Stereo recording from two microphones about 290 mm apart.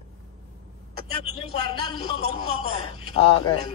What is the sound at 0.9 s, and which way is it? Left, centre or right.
Vehicle, right.